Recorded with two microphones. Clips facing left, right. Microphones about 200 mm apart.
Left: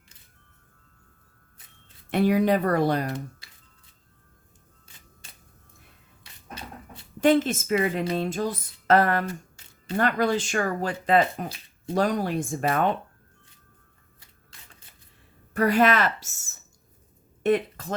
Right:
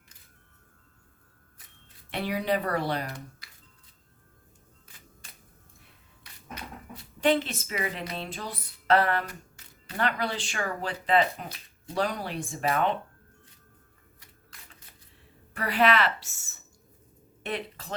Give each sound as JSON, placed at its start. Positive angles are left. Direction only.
{"t": 2.0, "sound": "speech", "side_deg": 45}
{"t": 3.4, "sound": "music", "side_deg": 25}
{"t": 6.5, "sound": "a sound", "side_deg": 30}
{"t": 7.2, "sound": "speech", "side_deg": 45}
{"t": 15.5, "sound": "speech", "side_deg": 45}